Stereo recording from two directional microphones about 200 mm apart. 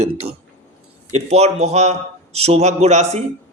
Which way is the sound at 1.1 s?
35° right (ahead or behind).